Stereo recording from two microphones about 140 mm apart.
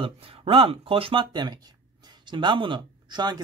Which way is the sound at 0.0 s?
40° right (ahead or behind).